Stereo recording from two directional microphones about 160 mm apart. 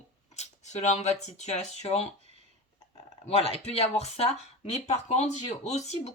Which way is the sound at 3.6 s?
40° left (ahead or behind).